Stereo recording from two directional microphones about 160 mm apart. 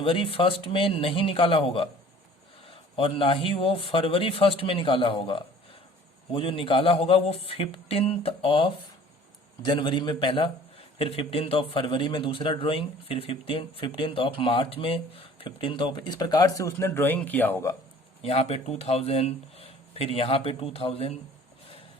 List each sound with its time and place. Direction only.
0.0 s a man's voice: 35° left (ahead or behind); by 17.7 s 15° left (ahead or behind)
18.2 s a man's voice: 40° left (ahead or behind)